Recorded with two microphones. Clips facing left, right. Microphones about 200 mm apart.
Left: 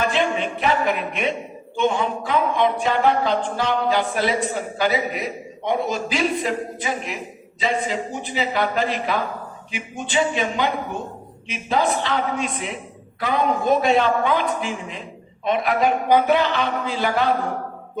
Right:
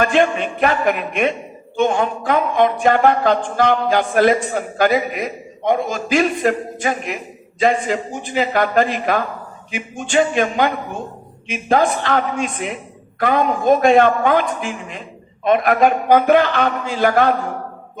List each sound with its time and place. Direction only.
0.0 s a woman's voice: 50° right (ahead or behind)